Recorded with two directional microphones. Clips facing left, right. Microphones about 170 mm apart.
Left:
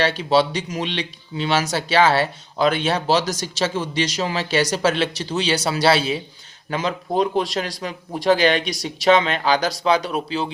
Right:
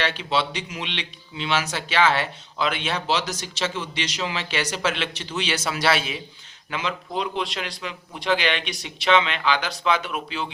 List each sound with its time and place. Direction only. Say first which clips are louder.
0.0 s speech: left 7 dB; 40° left (ahead or behind)